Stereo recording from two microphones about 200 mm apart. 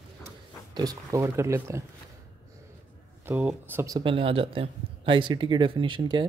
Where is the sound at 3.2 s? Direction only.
10° right (ahead or behind).